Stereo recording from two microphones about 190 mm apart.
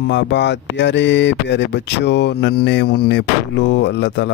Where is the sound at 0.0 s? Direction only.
65° left (ahead or behind).